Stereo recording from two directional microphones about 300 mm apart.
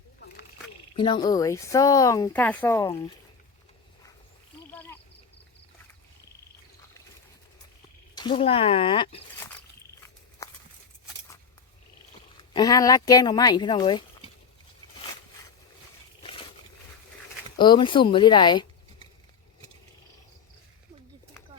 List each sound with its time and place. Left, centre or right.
0.9 s speech: centre
4.7 s frog: centre
8.1 s speech: centre
10.4 s a sound: centre
12.4 s speech: centre
17.6 s speech: centre